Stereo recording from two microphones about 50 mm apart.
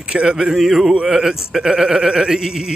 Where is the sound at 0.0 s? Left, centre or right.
Centre.